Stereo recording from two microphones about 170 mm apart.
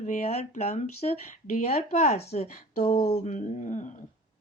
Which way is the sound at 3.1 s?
40° left (ahead or behind).